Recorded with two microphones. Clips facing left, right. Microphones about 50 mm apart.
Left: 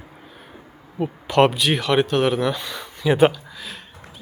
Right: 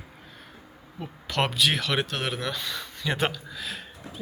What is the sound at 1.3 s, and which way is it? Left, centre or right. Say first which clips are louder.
Speech: left 7 dB; centre.